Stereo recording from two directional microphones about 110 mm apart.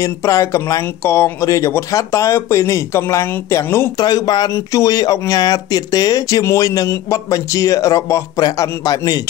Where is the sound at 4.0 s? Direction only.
40° left (ahead or behind).